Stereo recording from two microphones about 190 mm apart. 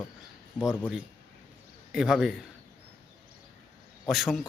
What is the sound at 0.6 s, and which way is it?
Speech, 5° right (ahead or behind).